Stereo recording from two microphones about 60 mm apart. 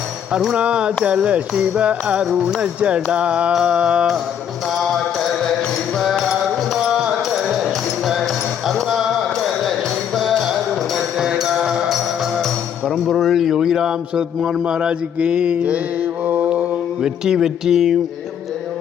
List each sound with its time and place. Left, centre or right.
0.3 s a man's voice: centre
1.0 s music: centre
2.5 s a man's voice: centre
4.8 s mantra: centre
6.0 s music: centre
6.8 s music: centre
13.1 s a man's voice: centre
16.2 s mantra: right
17.0 s a man's voice: centre